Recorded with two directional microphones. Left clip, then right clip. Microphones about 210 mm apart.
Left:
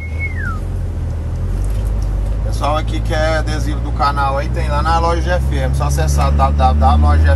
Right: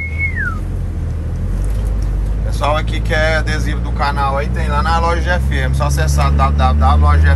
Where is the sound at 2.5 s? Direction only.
15° left (ahead or behind).